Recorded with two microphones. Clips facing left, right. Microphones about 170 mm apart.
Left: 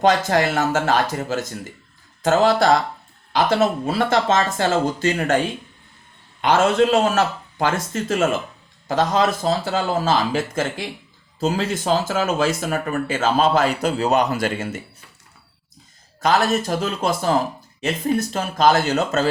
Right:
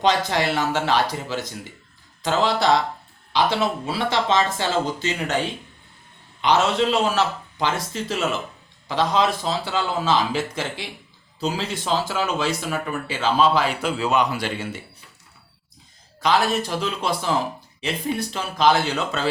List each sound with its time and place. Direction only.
0.3 s speech: 50° left (ahead or behind)
6.4 s speech: 50° left (ahead or behind)
16.2 s speech: 45° left (ahead or behind)